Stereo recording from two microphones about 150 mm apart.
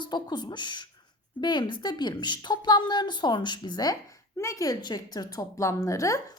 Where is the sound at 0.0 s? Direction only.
30° left (ahead or behind).